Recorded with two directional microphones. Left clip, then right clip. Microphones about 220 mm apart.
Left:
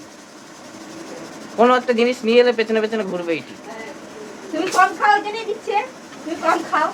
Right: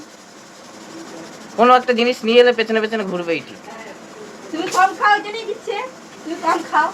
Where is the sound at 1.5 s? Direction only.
Centre (ahead or behind).